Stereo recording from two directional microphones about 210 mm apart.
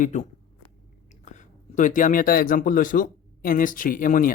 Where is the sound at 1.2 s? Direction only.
35° left (ahead or behind).